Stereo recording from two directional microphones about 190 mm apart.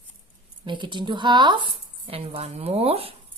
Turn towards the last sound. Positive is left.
turn(degrees=-30)  # may be behind; listen again after turning